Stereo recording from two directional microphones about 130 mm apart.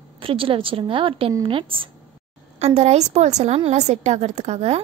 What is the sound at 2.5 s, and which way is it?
A woman's voice, 55° right (ahead or behind).